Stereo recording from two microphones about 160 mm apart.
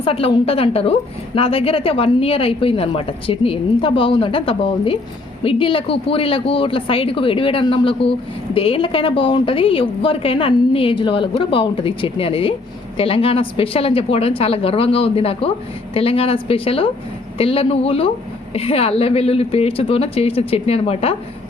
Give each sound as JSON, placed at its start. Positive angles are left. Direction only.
{"t": 0.0, "sound": "a woman's voice", "side_deg": 35}